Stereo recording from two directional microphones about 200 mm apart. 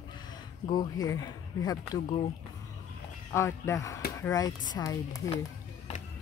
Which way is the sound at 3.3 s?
15° left (ahead or behind).